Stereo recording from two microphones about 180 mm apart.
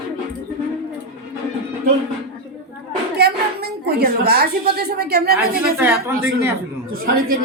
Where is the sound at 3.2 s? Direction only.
60° right (ahead or behind).